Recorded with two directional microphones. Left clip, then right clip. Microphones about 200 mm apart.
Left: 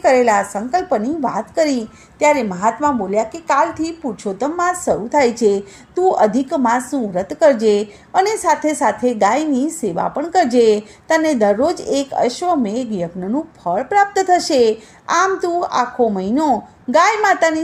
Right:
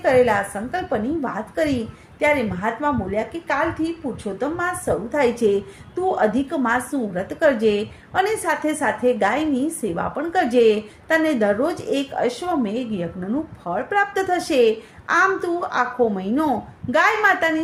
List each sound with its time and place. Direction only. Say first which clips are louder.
0.0 s a woman's voice: left 4 dB; 45° left (ahead or behind)